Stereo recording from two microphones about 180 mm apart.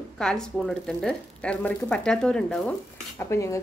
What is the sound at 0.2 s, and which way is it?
Speech, 5° left (ahead or behind).